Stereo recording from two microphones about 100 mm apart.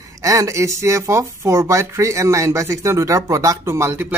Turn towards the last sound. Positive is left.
turn(degrees=-25)  # may be behind; listen again after turning